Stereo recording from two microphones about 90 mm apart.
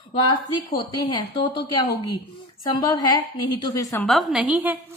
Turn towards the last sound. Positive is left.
turn(degrees=-15)  # may be behind; listen again after turning